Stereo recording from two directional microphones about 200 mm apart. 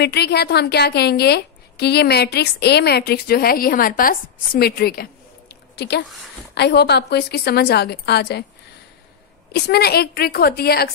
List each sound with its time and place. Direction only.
0.0 s a woman's voice: 55° left (ahead or behind)
9.5 s a woman's voice: 50° left (ahead or behind)